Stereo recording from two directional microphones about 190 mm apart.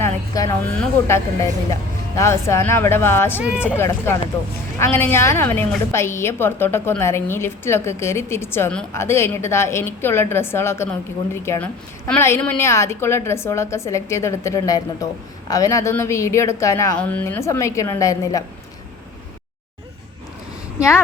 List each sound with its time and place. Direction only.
0.0 s a sound: 20° left (ahead or behind)
0.7 s a woman's voice: 10° left (ahead or behind)
3.3 s speech: 5° right (ahead or behind)
3.8 s a woman's voice: 15° left (ahead or behind)